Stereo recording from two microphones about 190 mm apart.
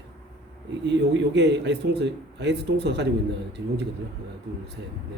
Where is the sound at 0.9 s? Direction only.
65° right (ahead or behind).